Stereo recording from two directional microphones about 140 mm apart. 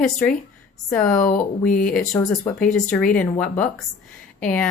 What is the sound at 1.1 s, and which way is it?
Speech, 70° left (ahead or behind).